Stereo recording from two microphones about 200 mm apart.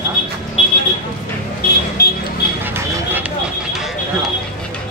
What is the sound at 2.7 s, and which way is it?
Vehicle, 10° right (ahead or behind).